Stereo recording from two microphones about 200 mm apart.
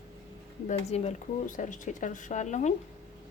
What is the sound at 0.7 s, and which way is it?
Speech, 35° left (ahead or behind).